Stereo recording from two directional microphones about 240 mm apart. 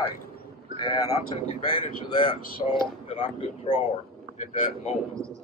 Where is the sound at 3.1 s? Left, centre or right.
Left.